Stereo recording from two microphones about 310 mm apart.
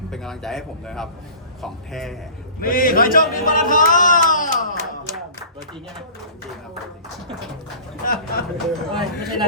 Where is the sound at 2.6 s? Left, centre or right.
Left.